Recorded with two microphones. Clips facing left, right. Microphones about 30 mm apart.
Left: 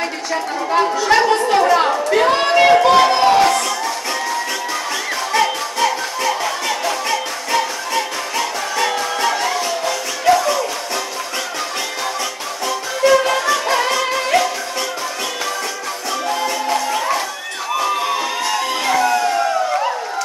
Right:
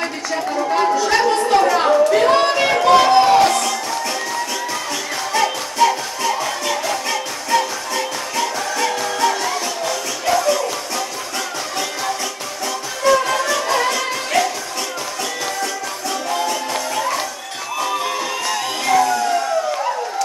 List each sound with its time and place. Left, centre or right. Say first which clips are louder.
0.3 s chatter: even; centre
2.0 s music: right 1 dB; centre
5.3 s music: left 2 dB; centre
13.0 s music: left 2 dB; centre
16.3 s music: left 3 dB; centre
18.9 s music: right 2 dB; centre